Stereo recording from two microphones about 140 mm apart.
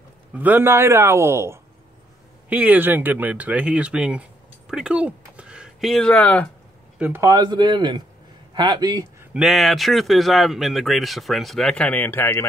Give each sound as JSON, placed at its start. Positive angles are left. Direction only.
{"t": 0.3, "sound": "a man's voice", "side_deg": -10}
{"t": 7.0, "sound": "speech", "side_deg": -15}
{"t": 7.3, "sound": "a man's voice", "side_deg": -30}
{"t": 9.2, "sound": "speech", "side_deg": -5}